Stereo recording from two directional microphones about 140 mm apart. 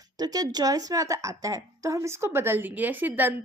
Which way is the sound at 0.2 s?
25° right (ahead or behind).